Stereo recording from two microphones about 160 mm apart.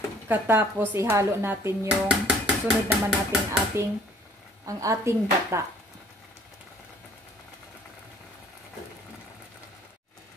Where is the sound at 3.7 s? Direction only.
15° right (ahead or behind).